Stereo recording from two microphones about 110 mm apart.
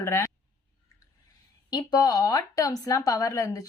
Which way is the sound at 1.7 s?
35° left (ahead or behind).